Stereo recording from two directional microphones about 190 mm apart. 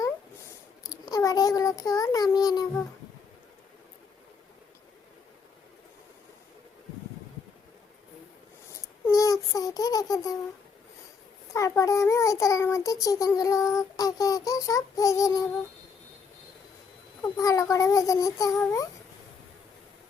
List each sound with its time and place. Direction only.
1.1 s child singing: 20° left (ahead or behind)
9.0 s a sound: 15° left (ahead or behind)
11.5 s a child's voice: 15° left (ahead or behind)
17.3 s a child's voice: 15° left (ahead or behind)